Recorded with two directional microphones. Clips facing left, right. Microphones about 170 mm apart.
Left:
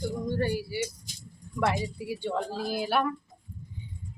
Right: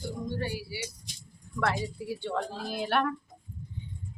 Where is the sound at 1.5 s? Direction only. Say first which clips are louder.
Left 2 dB; 15° left (ahead or behind).